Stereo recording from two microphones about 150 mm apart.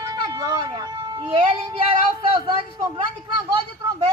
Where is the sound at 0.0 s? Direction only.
25° right (ahead or behind).